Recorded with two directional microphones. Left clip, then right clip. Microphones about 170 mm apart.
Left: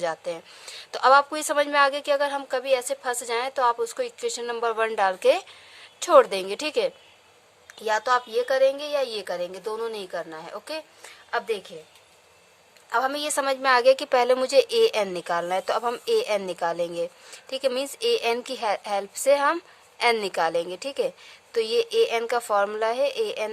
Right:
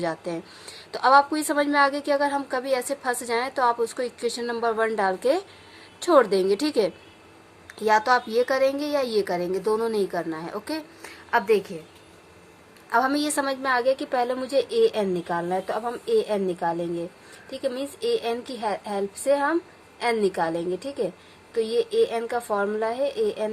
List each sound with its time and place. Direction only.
0.0 s a woman's voice: 50° left (ahead or behind)
11.3 s a woman's voice: 20° left (ahead or behind)
12.9 s a woman's voice: 35° left (ahead or behind); by 23.5 s 55° left (ahead or behind)